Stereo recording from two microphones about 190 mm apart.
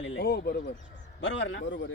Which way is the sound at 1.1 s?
70° left (ahead or behind).